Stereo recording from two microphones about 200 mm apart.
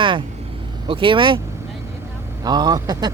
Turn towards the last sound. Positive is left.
turn(degrees=-20)  # may be behind; listen again after turning